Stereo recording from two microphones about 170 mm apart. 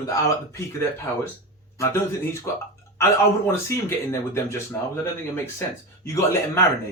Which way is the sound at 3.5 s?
15° left (ahead or behind).